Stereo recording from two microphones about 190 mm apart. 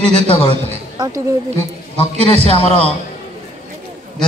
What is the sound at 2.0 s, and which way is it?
Speech, 30° left (ahead or behind).